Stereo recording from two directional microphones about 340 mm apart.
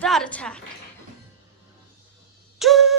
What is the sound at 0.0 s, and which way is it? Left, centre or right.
Speech, centre.